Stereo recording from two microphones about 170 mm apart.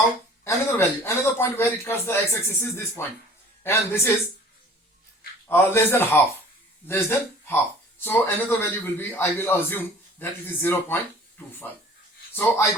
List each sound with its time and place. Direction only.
0.4 s speech: 15° left (ahead or behind)
5.5 s a man's voice: 15° left (ahead or behind)